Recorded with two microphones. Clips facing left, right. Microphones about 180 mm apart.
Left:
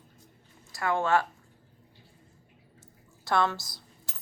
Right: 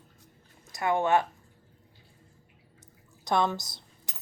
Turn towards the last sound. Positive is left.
turn(degrees=-20)  # may be behind; listen again after turning